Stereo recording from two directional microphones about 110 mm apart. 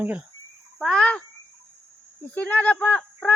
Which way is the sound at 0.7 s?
5° left (ahead or behind).